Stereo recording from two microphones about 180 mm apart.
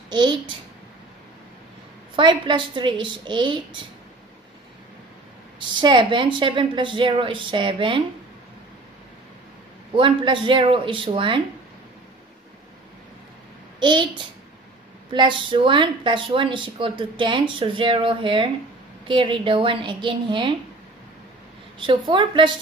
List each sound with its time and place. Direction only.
0.1 s speech: 25° right (ahead or behind)
2.1 s speech: 25° right (ahead or behind)
5.8 s speech: 25° right (ahead or behind)
9.9 s speech: 25° right (ahead or behind)
13.7 s speech: 25° right (ahead or behind)
21.7 s speech: 25° right (ahead or behind)